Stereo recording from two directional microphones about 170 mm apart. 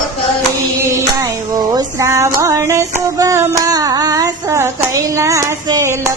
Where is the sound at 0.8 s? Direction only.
15° right (ahead or behind).